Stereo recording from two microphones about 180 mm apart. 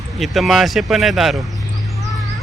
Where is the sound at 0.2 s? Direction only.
Centre (ahead or behind).